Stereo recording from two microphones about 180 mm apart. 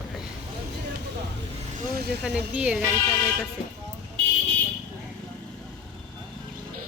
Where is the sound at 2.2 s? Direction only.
5° right (ahead or behind).